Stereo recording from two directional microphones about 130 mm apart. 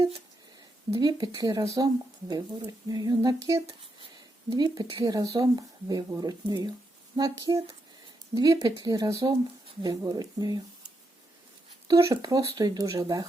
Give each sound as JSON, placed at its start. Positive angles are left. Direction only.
{"t": 0.9, "sound": "speech", "side_deg": -30}
{"t": 11.9, "sound": "speech", "side_deg": -25}